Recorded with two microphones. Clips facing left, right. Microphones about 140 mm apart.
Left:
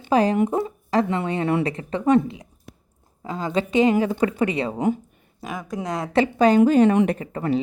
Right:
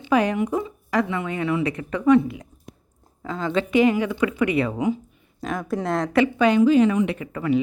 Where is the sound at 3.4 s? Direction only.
40° left (ahead or behind).